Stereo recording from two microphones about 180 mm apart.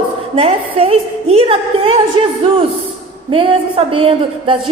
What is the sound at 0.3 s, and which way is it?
A woman's voice, 35° right (ahead or behind).